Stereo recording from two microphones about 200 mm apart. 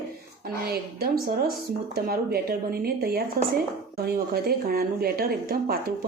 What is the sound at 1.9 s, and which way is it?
Speech, 50° right (ahead or behind).